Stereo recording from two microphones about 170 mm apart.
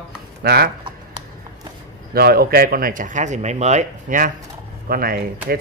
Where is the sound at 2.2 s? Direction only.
65° right (ahead or behind); by 4.3 s 45° right (ahead or behind).